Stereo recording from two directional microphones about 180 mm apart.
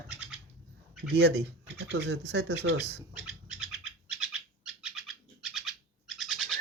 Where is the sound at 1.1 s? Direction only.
65° right (ahead or behind).